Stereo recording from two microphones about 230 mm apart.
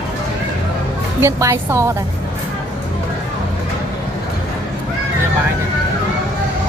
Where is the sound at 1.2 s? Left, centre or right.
Centre.